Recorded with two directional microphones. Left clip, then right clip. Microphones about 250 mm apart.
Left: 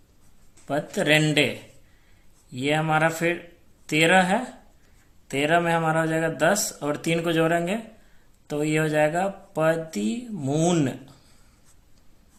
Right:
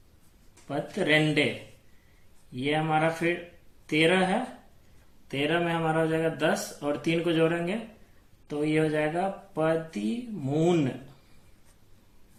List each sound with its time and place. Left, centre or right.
0.7 s speech: left
2.6 s speech: left